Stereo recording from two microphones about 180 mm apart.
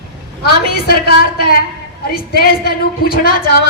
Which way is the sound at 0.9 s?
60° left (ahead or behind).